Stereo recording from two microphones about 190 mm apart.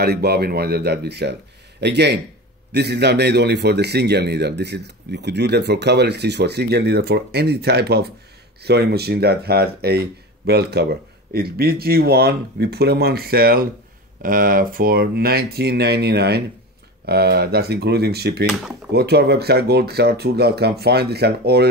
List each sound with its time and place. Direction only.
0.0 s speech: 55° right (ahead or behind)